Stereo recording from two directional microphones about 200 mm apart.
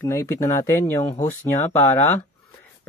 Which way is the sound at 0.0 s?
15° left (ahead or behind).